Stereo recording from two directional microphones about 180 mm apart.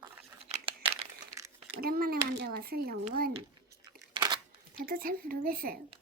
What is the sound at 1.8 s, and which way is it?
A child's voice, 55° right (ahead or behind).